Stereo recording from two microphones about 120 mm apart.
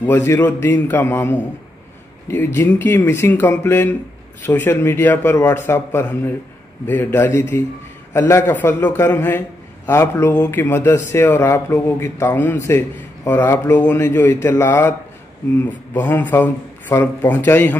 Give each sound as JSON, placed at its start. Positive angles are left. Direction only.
{"t": 0.0, "sound": "a man's voice", "side_deg": 15}
{"t": 2.4, "sound": "a man's voice", "side_deg": 15}
{"t": 10.5, "sound": "a man's voice", "side_deg": 20}